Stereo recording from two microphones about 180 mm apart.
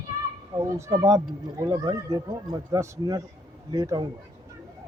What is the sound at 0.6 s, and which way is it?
A child's voice, 15° right (ahead or behind).